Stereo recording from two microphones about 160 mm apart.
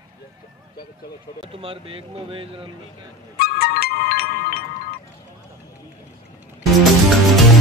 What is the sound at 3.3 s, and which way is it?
Music, 75° left (ahead or behind).